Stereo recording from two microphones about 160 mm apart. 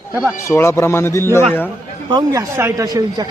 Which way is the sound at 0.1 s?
5° right (ahead or behind).